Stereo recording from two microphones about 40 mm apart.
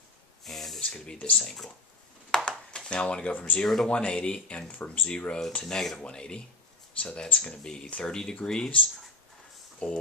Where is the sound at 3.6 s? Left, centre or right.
Centre.